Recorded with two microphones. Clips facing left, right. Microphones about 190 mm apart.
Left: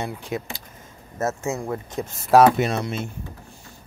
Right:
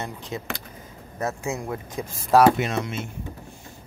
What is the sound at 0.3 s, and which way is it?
Speech, 10° left (ahead or behind).